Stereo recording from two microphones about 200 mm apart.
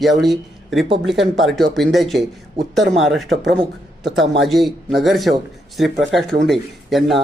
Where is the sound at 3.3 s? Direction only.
65° right (ahead or behind).